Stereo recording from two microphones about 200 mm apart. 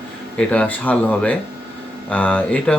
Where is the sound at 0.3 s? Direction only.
5° left (ahead or behind).